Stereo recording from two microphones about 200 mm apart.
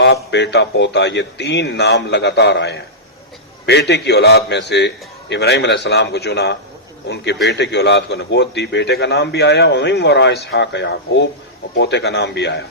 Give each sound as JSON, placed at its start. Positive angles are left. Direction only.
{"t": 0.0, "sound": "a man's voice", "side_deg": 60}